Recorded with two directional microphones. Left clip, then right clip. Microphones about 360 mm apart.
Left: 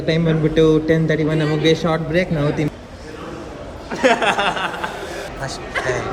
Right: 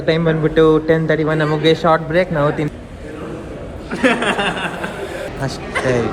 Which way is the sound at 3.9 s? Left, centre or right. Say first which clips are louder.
Even; left.